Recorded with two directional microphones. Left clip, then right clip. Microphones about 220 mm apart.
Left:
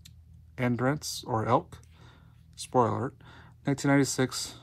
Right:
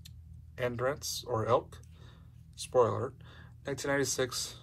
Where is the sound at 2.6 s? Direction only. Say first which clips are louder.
Left 1 dB; 35° left (ahead or behind).